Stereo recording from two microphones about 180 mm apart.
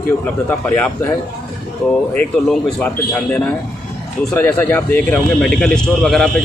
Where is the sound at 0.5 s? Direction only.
10° left (ahead or behind).